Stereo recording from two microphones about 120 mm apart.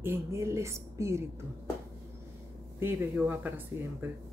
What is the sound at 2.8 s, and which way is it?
Speech, 15° right (ahead or behind).